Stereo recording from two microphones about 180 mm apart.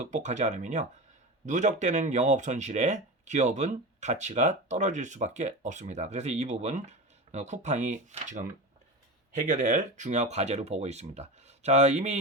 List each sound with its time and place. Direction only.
0.0 s speech: 40° right (ahead or behind)